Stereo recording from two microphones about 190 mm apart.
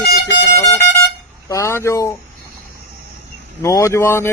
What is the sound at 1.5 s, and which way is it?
Speech, 15° left (ahead or behind).